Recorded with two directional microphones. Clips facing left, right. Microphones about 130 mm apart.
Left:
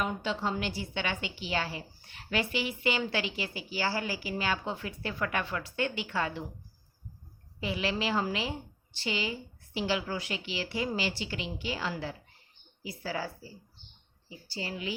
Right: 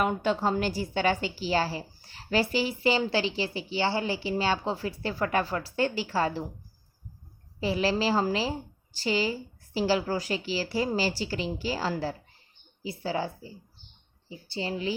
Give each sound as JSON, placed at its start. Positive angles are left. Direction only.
{"t": 0.0, "sound": "a woman's voice", "side_deg": -55}
{"t": 7.6, "sound": "a woman's voice", "side_deg": -35}
{"t": 12.8, "sound": "a woman's voice", "side_deg": -25}